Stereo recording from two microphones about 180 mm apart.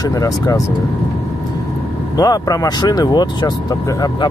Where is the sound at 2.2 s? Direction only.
20° left (ahead or behind).